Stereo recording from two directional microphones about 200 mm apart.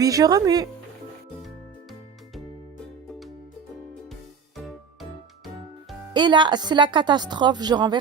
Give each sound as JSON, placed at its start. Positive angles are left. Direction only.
{"t": 0.0, "sound": "speech", "side_deg": -20}
{"t": 1.4, "sound": "music", "side_deg": 0}
{"t": 4.1, "sound": "music", "side_deg": 0}
{"t": 6.1, "sound": "a woman's voice", "side_deg": -25}